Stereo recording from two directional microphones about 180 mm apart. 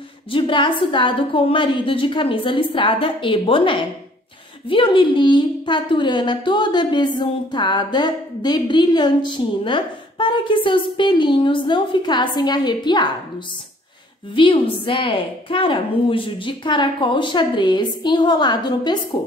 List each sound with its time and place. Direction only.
0.3 s a woman's voice: 25° left (ahead or behind)
14.3 s a woman's voice: 30° left (ahead or behind)